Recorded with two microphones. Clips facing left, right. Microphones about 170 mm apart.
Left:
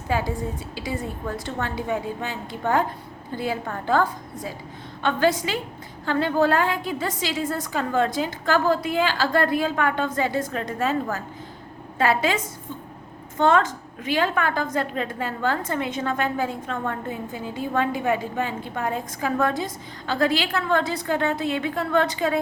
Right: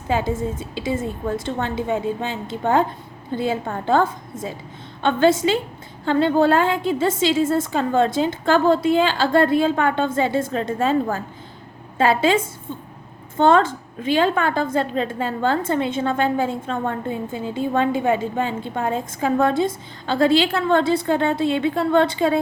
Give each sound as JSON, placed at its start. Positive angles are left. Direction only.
{"t": 0.1, "sound": "a woman's voice", "side_deg": -20}